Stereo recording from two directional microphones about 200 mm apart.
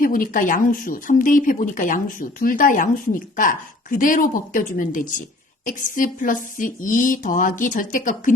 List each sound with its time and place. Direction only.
0.0 s a woman's voice: 45° left (ahead or behind)